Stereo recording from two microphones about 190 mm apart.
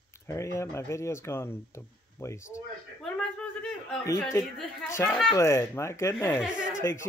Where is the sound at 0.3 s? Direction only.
15° left (ahead or behind).